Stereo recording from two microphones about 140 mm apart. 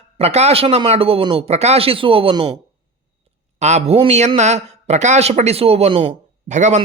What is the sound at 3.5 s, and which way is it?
Speech, 55° right (ahead or behind).